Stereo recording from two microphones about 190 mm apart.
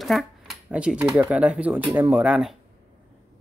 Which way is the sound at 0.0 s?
Centre (ahead or behind).